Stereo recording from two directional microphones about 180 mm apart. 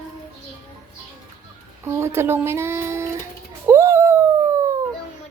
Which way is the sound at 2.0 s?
15° right (ahead or behind).